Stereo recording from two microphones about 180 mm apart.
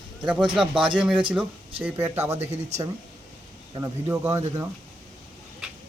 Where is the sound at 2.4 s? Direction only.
35° right (ahead or behind).